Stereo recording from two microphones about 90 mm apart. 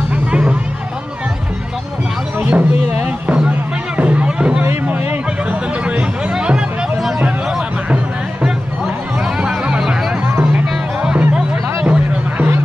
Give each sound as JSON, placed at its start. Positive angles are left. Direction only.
{"t": 0.1, "sound": "music", "side_deg": -10}
{"t": 2.3, "sound": "music", "side_deg": -15}